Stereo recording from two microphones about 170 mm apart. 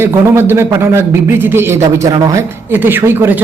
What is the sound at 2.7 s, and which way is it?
Speech, 10° right (ahead or behind).